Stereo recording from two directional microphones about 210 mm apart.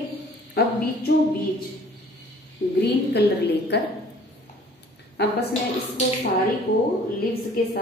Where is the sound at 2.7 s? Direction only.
50° left (ahead or behind).